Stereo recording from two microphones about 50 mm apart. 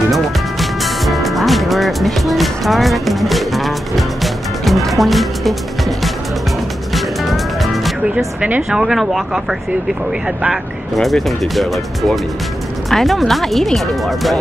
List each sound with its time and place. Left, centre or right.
0.1 s music: centre
8.6 s speech: centre
10.5 s speech: centre